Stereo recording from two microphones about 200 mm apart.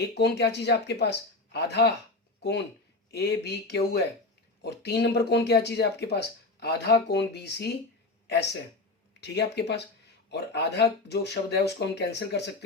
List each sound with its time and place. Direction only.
0.1 s speech: 55° left (ahead or behind)
3.1 s speech: 55° left (ahead or behind)
9.2 s a man's voice: 60° left (ahead or behind)